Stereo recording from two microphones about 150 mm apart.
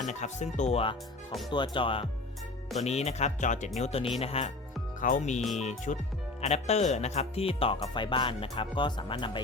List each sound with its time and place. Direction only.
0.0 s speech: 50° left (ahead or behind)
1.5 s speech: 30° left (ahead or behind)
2.7 s speech: 45° left (ahead or behind)
3.8 s speech: 45° left (ahead or behind)
4.9 s speech: 60° left (ahead or behind); by 9.4 s 30° left (ahead or behind)